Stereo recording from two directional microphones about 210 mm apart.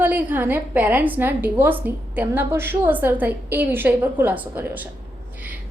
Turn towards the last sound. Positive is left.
turn(degrees=-10)  # may be behind; listen again after turning